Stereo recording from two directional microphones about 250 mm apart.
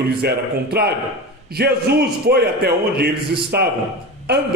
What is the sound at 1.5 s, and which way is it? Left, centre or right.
A man's voice, right.